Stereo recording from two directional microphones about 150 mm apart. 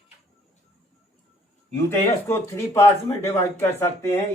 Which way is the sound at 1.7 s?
15° left (ahead or behind).